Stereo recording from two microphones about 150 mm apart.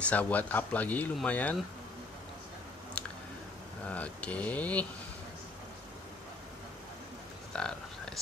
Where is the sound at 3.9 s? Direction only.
10° left (ahead or behind).